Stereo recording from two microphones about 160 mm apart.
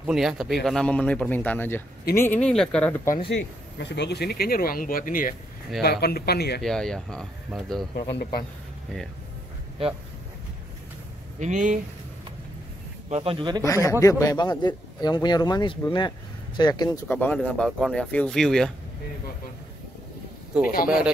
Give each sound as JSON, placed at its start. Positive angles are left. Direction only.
{"t": 0.0, "sound": "speech", "side_deg": -5}
{"t": 3.8, "sound": "speech", "side_deg": 90}
{"t": 5.8, "sound": "speech", "side_deg": 80}
{"t": 6.6, "sound": "speech", "side_deg": 5}
{"t": 7.9, "sound": "speech", "side_deg": 85}
{"t": 11.3, "sound": "speech", "side_deg": -50}
{"t": 13.1, "sound": "speech", "side_deg": -35}
{"t": 13.7, "sound": "a man's voice", "side_deg": 20}
{"t": 17.1, "sound": "speech", "side_deg": 10}
{"t": 20.5, "sound": "speech", "side_deg": -5}